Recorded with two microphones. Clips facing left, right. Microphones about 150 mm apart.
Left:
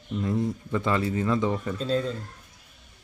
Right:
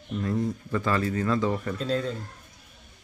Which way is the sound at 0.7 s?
20° left (ahead or behind).